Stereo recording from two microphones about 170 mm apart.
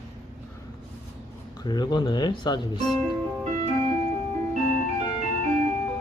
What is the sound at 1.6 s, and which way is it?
Speech, 25° left (ahead or behind).